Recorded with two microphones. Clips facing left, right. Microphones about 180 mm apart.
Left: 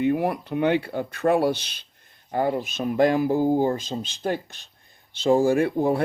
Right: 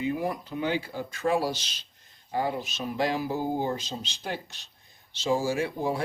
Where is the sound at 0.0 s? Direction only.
65° left (ahead or behind).